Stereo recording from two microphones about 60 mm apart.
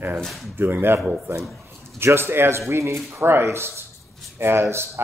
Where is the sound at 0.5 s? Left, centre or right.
Right.